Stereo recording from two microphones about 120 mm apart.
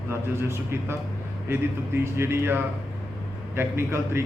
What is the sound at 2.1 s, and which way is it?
Speech, 20° right (ahead or behind).